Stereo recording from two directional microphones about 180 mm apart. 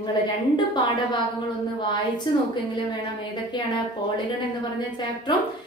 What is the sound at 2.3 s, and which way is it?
Speech, 25° left (ahead or behind).